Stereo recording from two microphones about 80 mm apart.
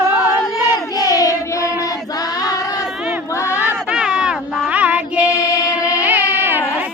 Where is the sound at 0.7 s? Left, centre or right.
Left.